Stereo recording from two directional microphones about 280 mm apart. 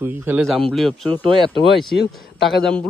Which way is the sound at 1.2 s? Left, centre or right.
Centre.